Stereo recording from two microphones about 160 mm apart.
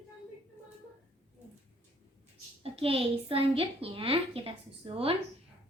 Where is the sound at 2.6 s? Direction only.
35° right (ahead or behind).